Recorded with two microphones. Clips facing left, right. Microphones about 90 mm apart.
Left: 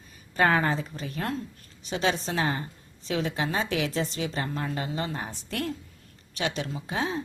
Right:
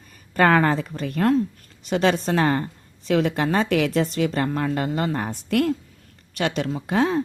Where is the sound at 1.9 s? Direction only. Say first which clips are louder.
Right 7 dB; 60° right (ahead or behind).